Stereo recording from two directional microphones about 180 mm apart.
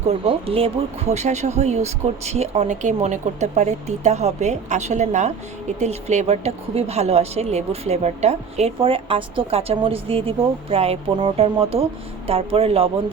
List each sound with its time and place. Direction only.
0.1 s a woman's voice: 30° right (ahead or behind)